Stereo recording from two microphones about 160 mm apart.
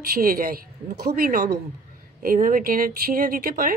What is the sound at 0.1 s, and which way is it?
A woman's voice, 65° right (ahead or behind).